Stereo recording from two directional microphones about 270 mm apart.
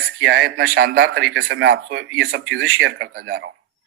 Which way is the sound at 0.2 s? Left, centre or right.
Right.